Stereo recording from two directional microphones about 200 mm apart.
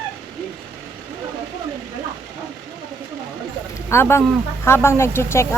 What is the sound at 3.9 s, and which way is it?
Speech, 10° left (ahead or behind).